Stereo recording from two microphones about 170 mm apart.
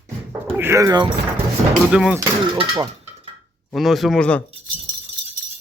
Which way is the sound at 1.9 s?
5° right (ahead or behind).